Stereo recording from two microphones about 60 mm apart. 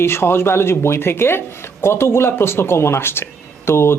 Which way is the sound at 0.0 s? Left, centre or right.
Left.